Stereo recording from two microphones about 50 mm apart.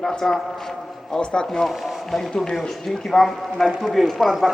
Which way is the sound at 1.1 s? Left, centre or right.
Centre.